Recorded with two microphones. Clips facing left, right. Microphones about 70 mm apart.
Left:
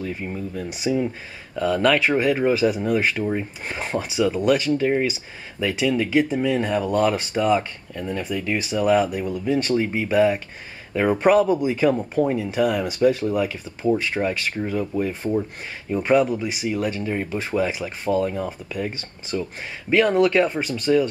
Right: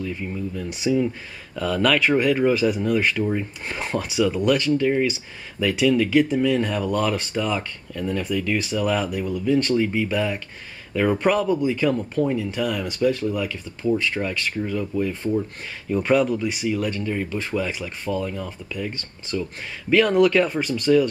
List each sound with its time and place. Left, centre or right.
0.1 s speech: left
0.7 s speech: centre
13.4 s speech: left
15.9 s speech: centre
16.6 s speech: centre
18.1 s speech: left
18.9 s speech: centre